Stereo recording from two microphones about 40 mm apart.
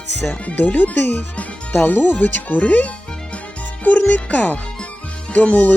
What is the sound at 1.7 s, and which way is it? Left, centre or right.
Speech, left.